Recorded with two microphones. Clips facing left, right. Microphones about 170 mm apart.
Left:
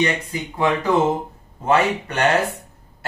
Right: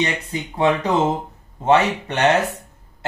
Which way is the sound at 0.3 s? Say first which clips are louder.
Right 2 dB; 25° right (ahead or behind).